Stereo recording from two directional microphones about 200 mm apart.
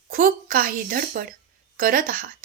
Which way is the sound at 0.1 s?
45° right (ahead or behind).